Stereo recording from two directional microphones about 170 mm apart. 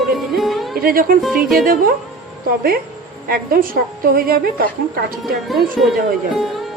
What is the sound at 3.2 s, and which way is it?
A woman's voice, 60° right (ahead or behind).